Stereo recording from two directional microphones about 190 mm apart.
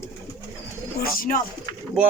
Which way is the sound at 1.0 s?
45° left (ahead or behind).